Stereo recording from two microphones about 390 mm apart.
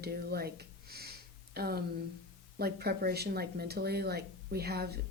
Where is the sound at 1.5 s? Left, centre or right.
Right.